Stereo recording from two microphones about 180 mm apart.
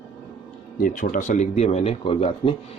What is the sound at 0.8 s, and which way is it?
Speech, 50° left (ahead or behind).